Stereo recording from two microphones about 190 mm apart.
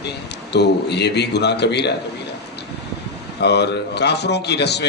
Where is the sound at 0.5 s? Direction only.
60° left (ahead or behind).